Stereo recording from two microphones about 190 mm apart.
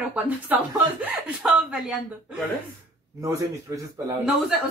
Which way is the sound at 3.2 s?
15° right (ahead or behind).